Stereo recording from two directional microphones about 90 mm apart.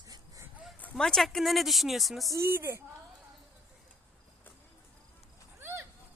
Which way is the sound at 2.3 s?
30° right (ahead or behind).